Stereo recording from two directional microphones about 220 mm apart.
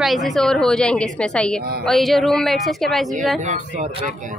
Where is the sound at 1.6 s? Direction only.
45° right (ahead or behind).